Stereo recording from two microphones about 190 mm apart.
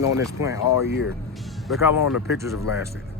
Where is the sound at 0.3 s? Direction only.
15° right (ahead or behind).